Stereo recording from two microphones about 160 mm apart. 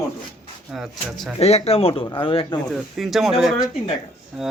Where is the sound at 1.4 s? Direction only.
40° left (ahead or behind).